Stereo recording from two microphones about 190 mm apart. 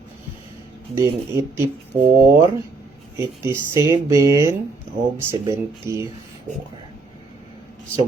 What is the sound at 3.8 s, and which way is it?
Speech, 15° right (ahead or behind).